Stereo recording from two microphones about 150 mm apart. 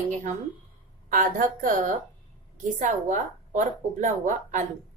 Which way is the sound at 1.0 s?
65° right (ahead or behind).